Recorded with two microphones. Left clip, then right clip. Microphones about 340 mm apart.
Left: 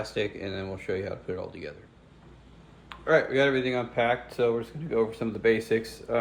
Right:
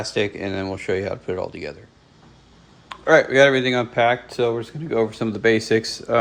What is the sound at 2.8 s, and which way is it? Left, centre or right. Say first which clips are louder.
Speech: right 8 dB; centre.